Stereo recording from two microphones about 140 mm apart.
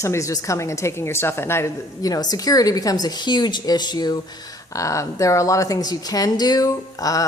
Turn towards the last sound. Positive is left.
turn(degrees=25)  # may be behind; listen again after turning